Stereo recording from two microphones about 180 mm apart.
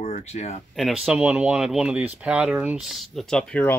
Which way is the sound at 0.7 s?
Centre (ahead or behind).